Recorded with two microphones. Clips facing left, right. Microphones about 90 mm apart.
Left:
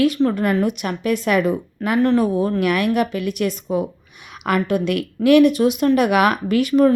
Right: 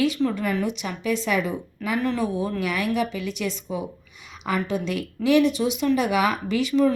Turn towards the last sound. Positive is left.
turn(degrees=55)  # may be behind; listen again after turning